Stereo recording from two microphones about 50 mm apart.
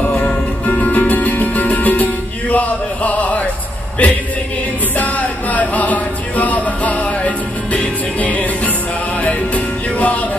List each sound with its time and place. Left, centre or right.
0.2 s music: left
2.5 s a sound: left
4.0 s music: left